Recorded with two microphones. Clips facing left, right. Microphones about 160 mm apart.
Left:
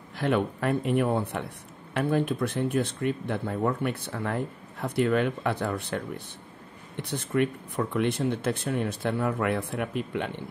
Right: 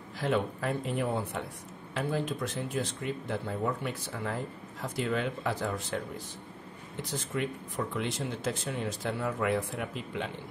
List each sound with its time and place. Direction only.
0.2 s speech: 60° left (ahead or behind)